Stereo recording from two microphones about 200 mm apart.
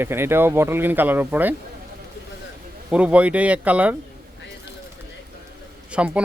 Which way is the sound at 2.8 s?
5° right (ahead or behind).